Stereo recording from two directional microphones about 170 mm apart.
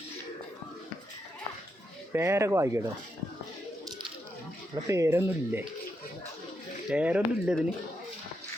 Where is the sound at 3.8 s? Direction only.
25° right (ahead or behind).